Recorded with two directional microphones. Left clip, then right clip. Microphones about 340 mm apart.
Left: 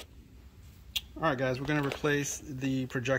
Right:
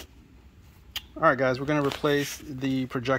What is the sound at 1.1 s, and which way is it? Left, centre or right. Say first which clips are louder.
Speech: right 9 dB; centre.